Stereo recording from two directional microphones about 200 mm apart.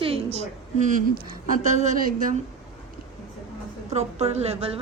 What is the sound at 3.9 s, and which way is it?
Speech, 35° right (ahead or behind).